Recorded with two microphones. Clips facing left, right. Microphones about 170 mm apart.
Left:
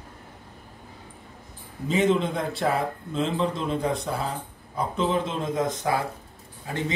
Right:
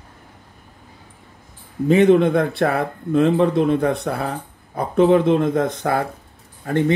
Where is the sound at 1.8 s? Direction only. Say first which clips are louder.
Right 9 dB; 60° right (ahead or behind).